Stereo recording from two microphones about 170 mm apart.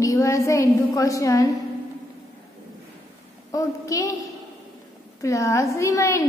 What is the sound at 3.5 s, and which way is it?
Speech, 20° left (ahead or behind).